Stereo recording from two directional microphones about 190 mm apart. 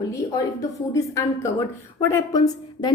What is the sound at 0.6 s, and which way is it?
A woman's voice, 15° left (ahead or behind).